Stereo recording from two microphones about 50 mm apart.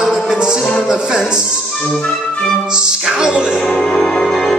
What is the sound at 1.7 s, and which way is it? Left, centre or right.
Music, centre.